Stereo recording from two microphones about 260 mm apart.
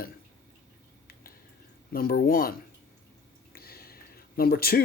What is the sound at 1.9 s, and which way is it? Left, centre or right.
Speech, left.